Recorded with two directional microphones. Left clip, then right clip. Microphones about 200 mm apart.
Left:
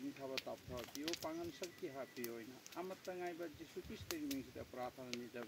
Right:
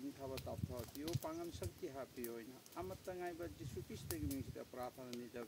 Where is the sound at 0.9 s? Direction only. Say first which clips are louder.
Left 4 dB; 65° right (ahead or behind).